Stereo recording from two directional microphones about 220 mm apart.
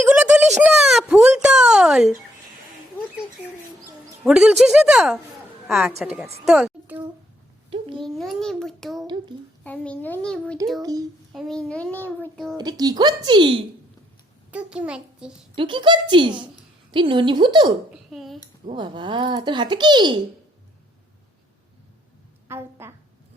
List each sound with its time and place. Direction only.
0.0 s a sound: 5° right (ahead or behind)
4.2 s a child's voice: 5° right (ahead or behind)
7.7 s a child's voice: 20° right (ahead or behind)
8.0 s a child's voice: centre (ahead or behind)
9.3 s a child's voice: 20° right (ahead or behind)
9.6 s a child's voice: 5° left (ahead or behind)
12.5 s a child's voice: 20° right (ahead or behind)
14.5 s a child's voice: 5° right (ahead or behind)
15.5 s a child's voice: 20° right (ahead or behind)
17.9 s speech: centre (ahead or behind)
18.6 s a child's voice: 20° right (ahead or behind)
22.4 s a woman's voice: 10° right (ahead or behind)